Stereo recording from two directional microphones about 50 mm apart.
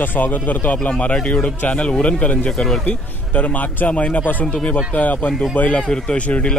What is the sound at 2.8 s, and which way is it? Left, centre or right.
Speech, left.